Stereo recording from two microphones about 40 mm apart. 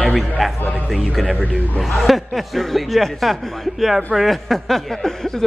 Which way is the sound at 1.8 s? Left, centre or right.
Centre.